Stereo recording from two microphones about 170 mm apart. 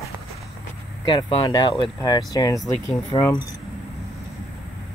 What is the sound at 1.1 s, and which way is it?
Speech, 25° left (ahead or behind).